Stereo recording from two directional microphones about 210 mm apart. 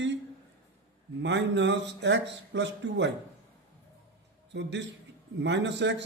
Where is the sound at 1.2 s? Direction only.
60° right (ahead or behind).